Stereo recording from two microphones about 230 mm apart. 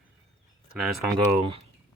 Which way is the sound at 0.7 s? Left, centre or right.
Centre.